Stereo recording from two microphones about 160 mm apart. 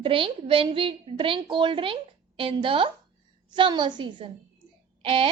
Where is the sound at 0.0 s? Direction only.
35° right (ahead or behind).